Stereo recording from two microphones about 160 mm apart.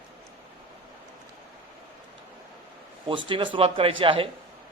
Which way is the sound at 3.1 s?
30° right (ahead or behind).